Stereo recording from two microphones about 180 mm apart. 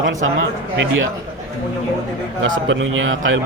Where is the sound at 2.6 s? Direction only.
90° right.